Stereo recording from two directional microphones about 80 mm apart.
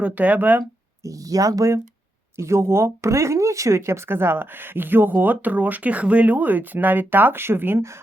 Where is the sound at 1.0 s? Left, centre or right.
Right.